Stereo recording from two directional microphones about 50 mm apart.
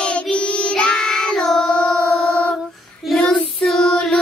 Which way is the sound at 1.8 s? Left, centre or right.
Centre.